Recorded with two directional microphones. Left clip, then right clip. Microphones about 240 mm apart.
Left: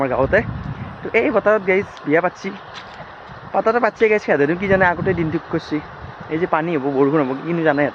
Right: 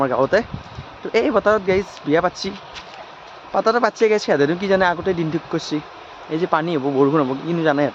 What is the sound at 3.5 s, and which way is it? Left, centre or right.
A man's voice, centre.